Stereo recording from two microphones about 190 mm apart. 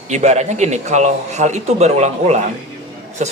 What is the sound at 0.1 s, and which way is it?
Speech, 35° right (ahead or behind).